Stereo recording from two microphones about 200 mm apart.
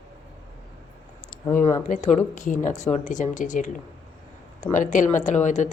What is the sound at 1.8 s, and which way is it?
A woman's voice, 40° left (ahead or behind).